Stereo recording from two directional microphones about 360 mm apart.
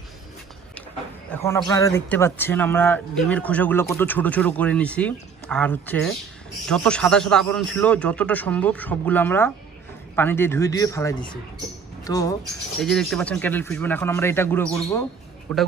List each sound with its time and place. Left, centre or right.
1.3 s speech: centre